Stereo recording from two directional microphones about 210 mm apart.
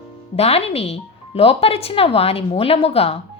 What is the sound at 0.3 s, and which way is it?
Speech, 30° left (ahead or behind).